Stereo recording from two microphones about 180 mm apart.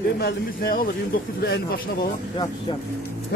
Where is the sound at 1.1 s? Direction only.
65° left (ahead or behind).